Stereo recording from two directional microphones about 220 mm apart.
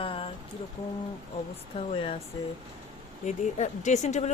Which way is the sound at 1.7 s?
25° left (ahead or behind).